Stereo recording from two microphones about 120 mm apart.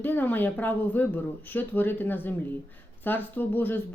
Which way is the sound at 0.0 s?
15° left (ahead or behind).